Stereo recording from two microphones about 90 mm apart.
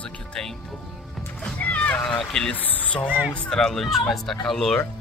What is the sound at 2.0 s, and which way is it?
Speech, 10° left (ahead or behind).